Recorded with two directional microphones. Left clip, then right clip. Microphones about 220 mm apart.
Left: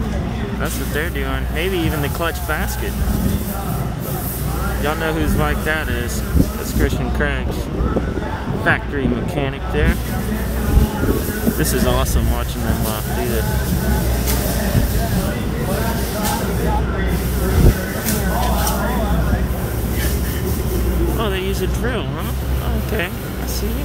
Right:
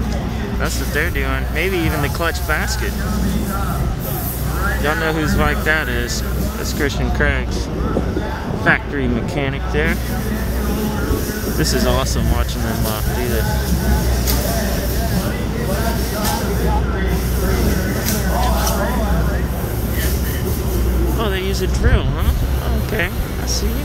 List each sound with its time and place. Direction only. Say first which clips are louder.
1.6 s speech: right 1 dB; centre (ahead or behind)
4.8 s speech: right 1 dB; centre (ahead or behind)
8.6 s speech: right 2 dB; centre (ahead or behind)
11.6 s speech: right 2 dB; centre (ahead or behind)
21.2 s speech: right 2 dB; centre (ahead or behind)